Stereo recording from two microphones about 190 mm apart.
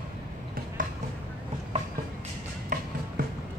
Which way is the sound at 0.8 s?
45° right (ahead or behind).